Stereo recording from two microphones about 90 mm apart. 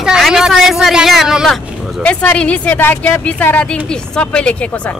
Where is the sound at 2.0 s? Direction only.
15° left (ahead or behind).